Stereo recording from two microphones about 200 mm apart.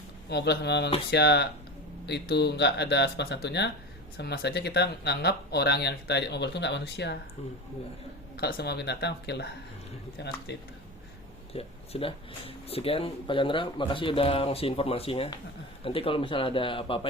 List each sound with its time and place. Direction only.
0.3 s speech: 55° left (ahead or behind)
8.4 s speech: 50° left (ahead or behind)
11.5 s speech: 30° left (ahead or behind)